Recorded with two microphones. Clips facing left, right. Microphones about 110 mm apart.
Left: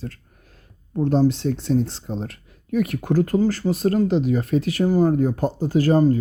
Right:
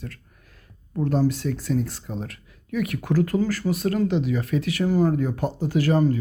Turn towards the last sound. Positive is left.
turn(degrees=35)  # may be behind; listen again after turning